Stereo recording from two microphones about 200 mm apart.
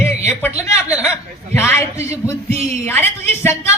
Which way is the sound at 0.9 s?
5° right (ahead or behind).